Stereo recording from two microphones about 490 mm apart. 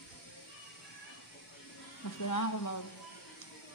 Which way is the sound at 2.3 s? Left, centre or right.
Left.